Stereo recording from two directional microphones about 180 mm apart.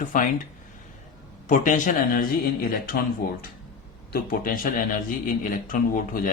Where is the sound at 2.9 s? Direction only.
65° left (ahead or behind).